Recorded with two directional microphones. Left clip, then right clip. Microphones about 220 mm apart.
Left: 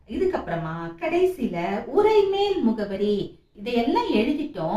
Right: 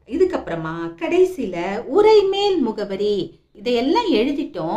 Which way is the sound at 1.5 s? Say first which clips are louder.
Right 4 dB; 50° right (ahead or behind).